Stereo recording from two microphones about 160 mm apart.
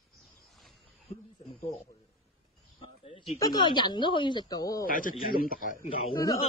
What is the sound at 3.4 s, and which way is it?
Speech, 25° left (ahead or behind).